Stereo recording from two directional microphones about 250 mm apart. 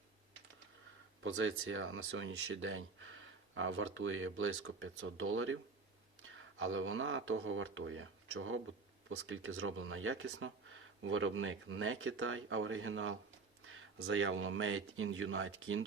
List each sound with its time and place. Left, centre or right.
1.2 s speech: right